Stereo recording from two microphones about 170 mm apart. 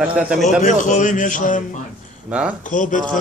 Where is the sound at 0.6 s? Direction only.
50° left (ahead or behind).